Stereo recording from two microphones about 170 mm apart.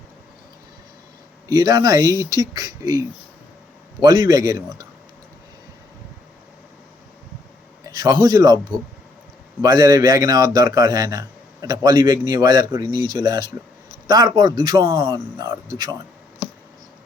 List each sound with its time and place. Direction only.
1.5 s a man's voice: 20° right (ahead or behind)
7.9 s speech: 25° right (ahead or behind)
9.6 s a man's voice: 20° right (ahead or behind)